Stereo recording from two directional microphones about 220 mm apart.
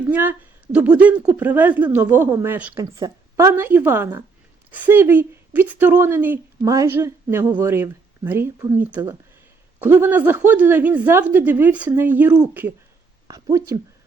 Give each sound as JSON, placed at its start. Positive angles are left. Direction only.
{"t": 0.1, "sound": "a woman's voice", "side_deg": -5}